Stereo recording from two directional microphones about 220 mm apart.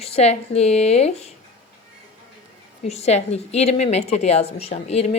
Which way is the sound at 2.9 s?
30° left (ahead or behind).